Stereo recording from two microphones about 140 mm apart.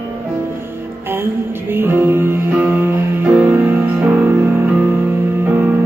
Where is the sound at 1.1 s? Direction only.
15° right (ahead or behind).